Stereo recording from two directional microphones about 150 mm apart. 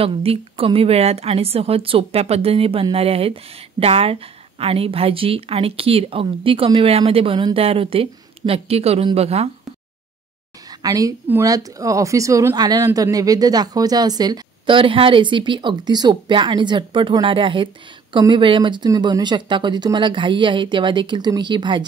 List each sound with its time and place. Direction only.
0.0 s a woman's voice: 40° right (ahead or behind)
10.7 s a woman's voice: 25° right (ahead or behind)